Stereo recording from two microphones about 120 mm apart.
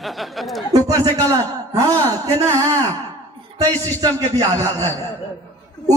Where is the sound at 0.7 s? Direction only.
30° right (ahead or behind).